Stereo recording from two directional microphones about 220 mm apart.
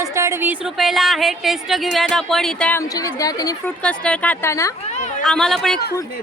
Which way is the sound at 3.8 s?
5° left (ahead or behind).